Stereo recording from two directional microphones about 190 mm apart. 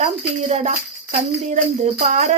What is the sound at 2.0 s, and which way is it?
Speech, 40° right (ahead or behind).